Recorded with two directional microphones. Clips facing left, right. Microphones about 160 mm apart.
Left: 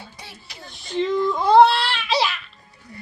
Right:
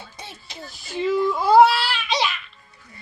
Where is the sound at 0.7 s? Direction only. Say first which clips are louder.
Left 1 dB; 5° right (ahead or behind).